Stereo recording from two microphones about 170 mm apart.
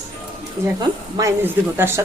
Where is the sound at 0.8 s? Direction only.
20° right (ahead or behind).